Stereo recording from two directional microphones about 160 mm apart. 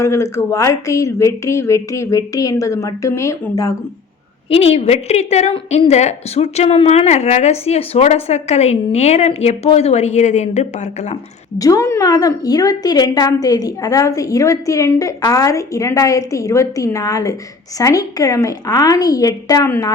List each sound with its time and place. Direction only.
0.0 s a woman's voice: 20° left (ahead or behind)
4.4 s a woman's voice: 35° left (ahead or behind)
11.5 s a woman's voice: 20° left (ahead or behind)